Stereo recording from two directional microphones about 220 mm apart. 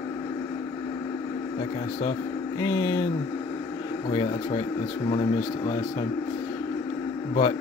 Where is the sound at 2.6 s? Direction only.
15° left (ahead or behind).